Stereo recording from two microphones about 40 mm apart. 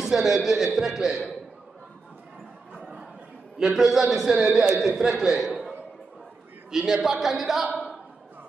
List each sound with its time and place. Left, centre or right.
0.0 s a man's voice: centre
3.5 s a man's voice: centre
5.5 s a sound: right
6.7 s a man's voice: centre